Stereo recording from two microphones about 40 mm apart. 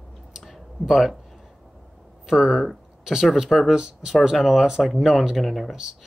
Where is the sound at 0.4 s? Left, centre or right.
Centre.